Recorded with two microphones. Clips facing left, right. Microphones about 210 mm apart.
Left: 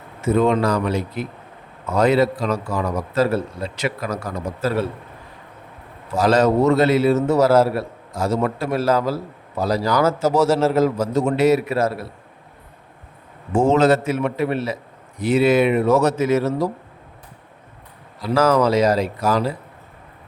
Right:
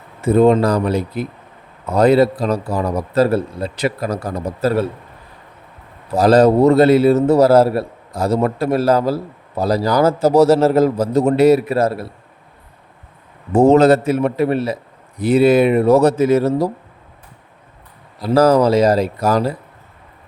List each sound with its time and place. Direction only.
0.2 s a man's voice: 35° right (ahead or behind)
6.1 s a man's voice: 35° right (ahead or behind)
13.5 s a man's voice: 40° right (ahead or behind)
18.2 s a man's voice: 35° right (ahead or behind)